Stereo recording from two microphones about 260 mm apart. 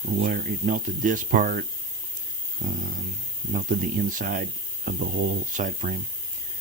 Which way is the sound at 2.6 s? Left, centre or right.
Right.